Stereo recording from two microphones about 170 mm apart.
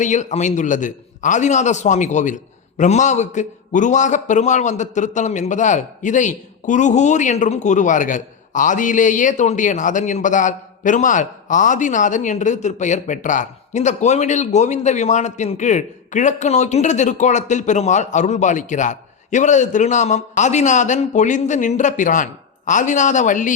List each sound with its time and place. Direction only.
0.0 s a man's voice: 45° left (ahead or behind)